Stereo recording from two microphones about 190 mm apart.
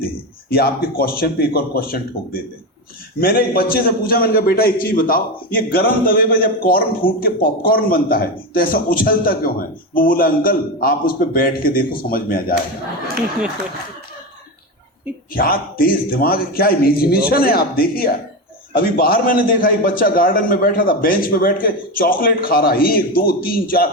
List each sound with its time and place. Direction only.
0.5 s a man's voice: 50° left (ahead or behind)
15.3 s a man's voice: 50° left (ahead or behind)